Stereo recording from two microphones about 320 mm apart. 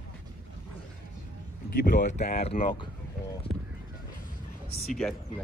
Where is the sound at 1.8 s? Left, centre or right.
Left.